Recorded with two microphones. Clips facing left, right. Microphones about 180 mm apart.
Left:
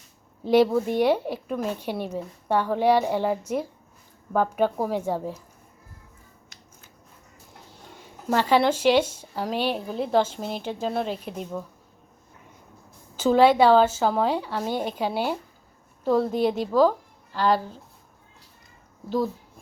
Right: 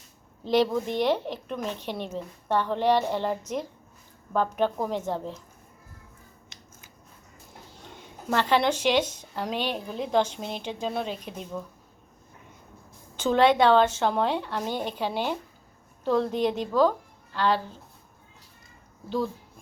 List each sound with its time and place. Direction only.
0.4 s a woman's voice: 10° left (ahead or behind)
8.3 s a woman's voice: 10° left (ahead or behind)
13.1 s a woman's voice: 5° left (ahead or behind)
19.0 s a woman's voice: 5° left (ahead or behind)